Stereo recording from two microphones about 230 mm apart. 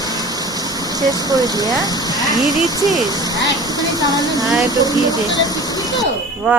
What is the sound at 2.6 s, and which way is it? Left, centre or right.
Speech, centre.